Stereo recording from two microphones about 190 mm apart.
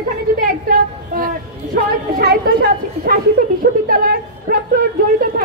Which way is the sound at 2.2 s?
55° right (ahead or behind).